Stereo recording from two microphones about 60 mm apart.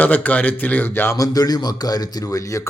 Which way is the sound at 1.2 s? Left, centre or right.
Left.